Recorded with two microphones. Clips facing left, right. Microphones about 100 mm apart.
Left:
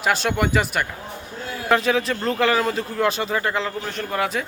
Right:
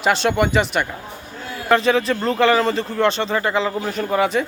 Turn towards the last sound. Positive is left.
turn(degrees=0)  # may be behind; listen again after turning